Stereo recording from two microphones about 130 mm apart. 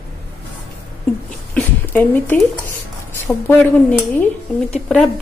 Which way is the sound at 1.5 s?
15° left (ahead or behind).